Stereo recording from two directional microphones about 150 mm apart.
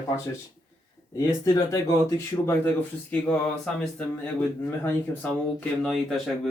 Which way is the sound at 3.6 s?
5° left (ahead or behind).